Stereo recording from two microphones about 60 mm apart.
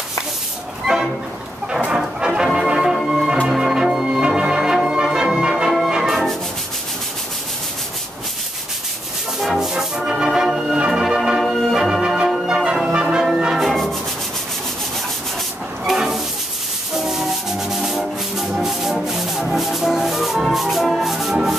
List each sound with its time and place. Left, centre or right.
0.9 s music: centre
9.4 s music: centre
12.6 s music: centre
13.5 s music: centre
15.8 s a sound: centre
16.9 s music: centre